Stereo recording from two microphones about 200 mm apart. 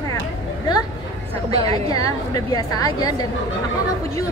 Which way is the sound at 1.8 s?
15° left (ahead or behind).